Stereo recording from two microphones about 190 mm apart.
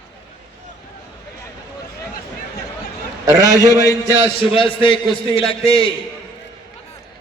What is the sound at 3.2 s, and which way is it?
Speech, 20° right (ahead or behind).